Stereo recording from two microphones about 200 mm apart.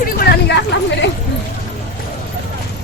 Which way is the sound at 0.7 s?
60° left (ahead or behind).